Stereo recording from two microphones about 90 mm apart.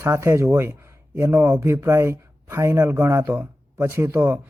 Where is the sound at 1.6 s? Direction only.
30° right (ahead or behind).